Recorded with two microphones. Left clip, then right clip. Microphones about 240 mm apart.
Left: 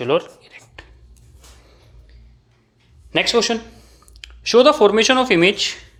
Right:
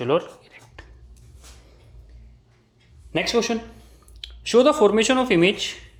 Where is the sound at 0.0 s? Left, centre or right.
Centre.